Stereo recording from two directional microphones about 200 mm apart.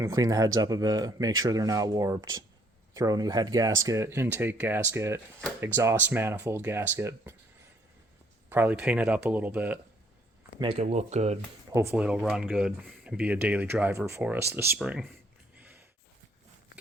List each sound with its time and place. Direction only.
0.0 s speech: 15° right (ahead or behind)
8.4 s speech: 10° right (ahead or behind)
10.6 s speech: 30° right (ahead or behind)
11.7 s speech: 15° right (ahead or behind)
15.5 s a sound: 10° right (ahead or behind)